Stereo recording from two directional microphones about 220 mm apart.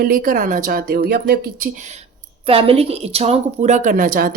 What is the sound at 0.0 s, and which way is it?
A woman's voice, 40° right (ahead or behind).